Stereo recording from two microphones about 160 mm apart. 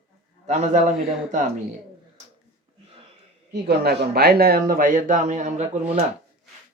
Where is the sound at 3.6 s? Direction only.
85° right; by 5.7 s 50° right (ahead or behind).